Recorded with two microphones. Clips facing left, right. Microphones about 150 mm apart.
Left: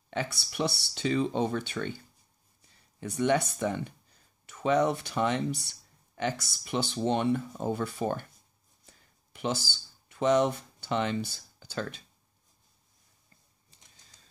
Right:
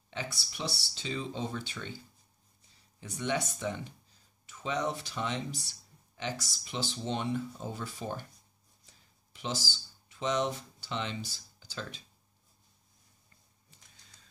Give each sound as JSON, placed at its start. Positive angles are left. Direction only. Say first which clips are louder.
{"t": 0.1, "sound": "speech", "louder": "left 6 dB", "side_deg": 60}
{"t": 3.0, "sound": "speech", "louder": "left 7 dB", "side_deg": 55}
{"t": 9.3, "sound": "speech", "louder": "left 5 dB", "side_deg": 60}